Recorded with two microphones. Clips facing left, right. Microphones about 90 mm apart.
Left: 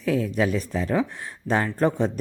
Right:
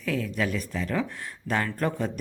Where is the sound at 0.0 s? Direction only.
30° left (ahead or behind).